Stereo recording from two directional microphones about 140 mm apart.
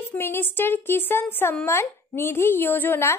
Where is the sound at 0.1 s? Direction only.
15° left (ahead or behind).